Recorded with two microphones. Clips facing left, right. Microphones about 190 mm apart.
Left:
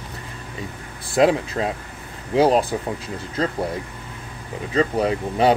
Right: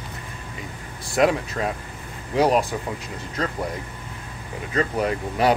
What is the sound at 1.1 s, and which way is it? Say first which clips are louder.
Speech: left 3 dB; 25° left (ahead or behind).